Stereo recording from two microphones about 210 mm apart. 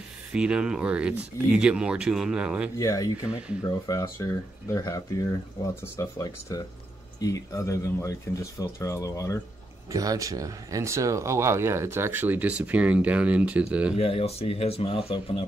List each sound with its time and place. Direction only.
0.3 s speech: 5° right (ahead or behind)
2.8 s speech: 15° left (ahead or behind)
9.9 s speech: 15° right (ahead or behind)
13.9 s speech: 30° left (ahead or behind)